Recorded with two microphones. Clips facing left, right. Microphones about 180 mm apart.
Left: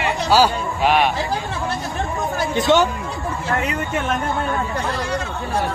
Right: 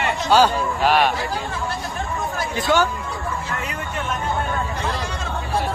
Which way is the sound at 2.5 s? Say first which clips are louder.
Left 3 dB; 25° left (ahead or behind).